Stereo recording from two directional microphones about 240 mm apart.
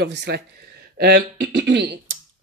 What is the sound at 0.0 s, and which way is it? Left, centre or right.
Speech, right.